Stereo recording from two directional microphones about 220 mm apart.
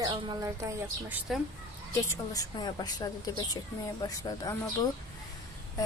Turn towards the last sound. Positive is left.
turn(degrees=15)  # may be behind; listen again after turning